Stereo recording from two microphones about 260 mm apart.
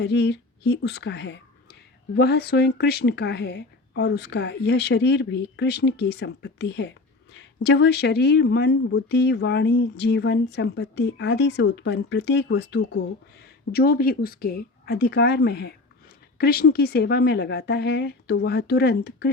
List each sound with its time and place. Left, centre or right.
0.0 s speech: left